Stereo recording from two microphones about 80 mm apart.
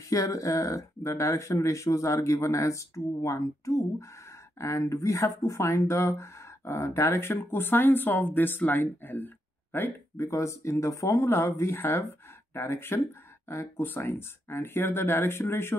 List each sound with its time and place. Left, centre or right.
0.1 s speech: left